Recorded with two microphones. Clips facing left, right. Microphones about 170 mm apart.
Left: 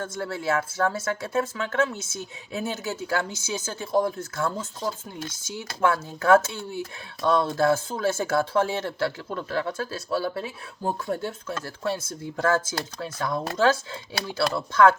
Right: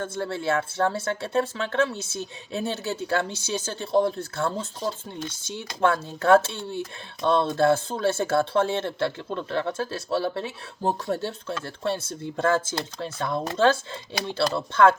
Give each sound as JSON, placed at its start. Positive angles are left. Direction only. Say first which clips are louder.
{"t": 0.0, "sound": "speech", "louder": "right 1 dB", "side_deg": -30}